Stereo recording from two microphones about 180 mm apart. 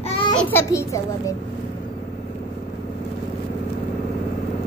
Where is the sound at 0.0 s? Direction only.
30° left (ahead or behind).